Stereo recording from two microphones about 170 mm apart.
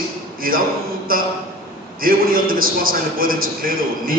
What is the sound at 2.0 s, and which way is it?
A man's voice, 60° right (ahead or behind).